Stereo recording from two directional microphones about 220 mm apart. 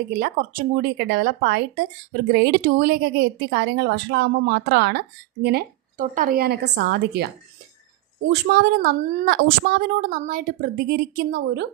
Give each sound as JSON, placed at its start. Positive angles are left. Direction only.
{"t": 0.2, "sound": "a woman's voice", "side_deg": -45}
{"t": 8.3, "sound": "a woman's voice", "side_deg": -45}